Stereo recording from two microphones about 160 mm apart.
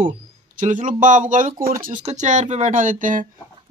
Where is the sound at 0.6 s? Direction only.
55° right (ahead or behind).